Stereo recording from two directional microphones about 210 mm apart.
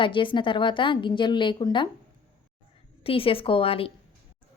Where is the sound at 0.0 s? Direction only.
25° left (ahead or behind).